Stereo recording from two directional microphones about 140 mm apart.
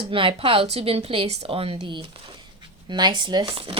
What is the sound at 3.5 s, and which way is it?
Speech, 45° right (ahead or behind).